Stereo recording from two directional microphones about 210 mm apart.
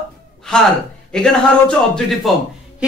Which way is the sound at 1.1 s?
5° left (ahead or behind).